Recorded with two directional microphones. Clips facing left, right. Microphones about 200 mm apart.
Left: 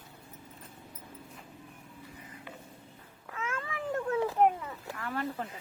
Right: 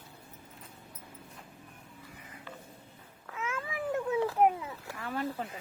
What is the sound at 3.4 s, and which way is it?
Cat, 5° right (ahead or behind).